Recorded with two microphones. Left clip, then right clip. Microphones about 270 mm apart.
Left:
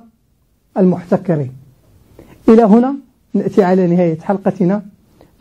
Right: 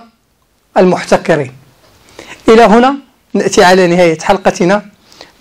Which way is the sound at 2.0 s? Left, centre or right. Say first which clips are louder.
Right 12 dB; centre.